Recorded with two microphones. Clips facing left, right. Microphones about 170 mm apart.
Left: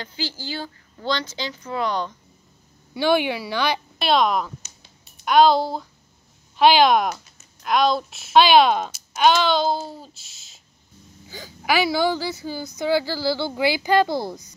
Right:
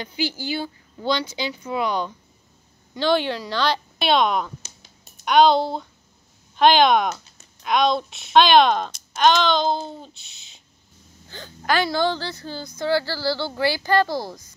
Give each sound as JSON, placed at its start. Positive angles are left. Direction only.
{"t": 0.0, "sound": "speech", "side_deg": -15}
{"t": 2.9, "sound": "speech", "side_deg": 10}
{"t": 4.0, "sound": "speech", "side_deg": 0}
{"t": 4.6, "sound": "a sound", "side_deg": -45}
{"t": 5.2, "sound": "speech", "side_deg": 0}